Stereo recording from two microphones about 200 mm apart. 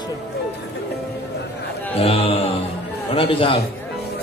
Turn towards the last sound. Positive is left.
turn(degrees=25)  # may be behind; listen again after turning